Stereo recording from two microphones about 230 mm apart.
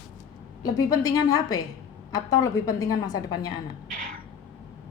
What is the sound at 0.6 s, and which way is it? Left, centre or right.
A woman's voice, centre.